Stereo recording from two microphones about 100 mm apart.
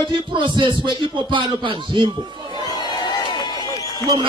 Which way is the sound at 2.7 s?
45° left (ahead or behind).